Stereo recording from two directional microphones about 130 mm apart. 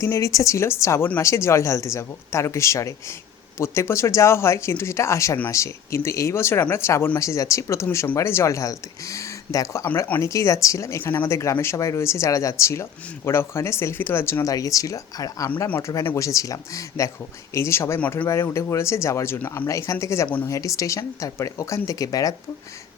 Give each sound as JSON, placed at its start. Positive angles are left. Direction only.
{"t": 0.0, "sound": "speech", "side_deg": 25}
{"t": 20.2, "sound": "speech", "side_deg": 15}
{"t": 20.5, "sound": "speech", "side_deg": 25}